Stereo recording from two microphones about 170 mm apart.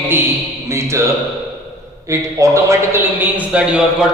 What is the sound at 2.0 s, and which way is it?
A man's voice, 20° right (ahead or behind).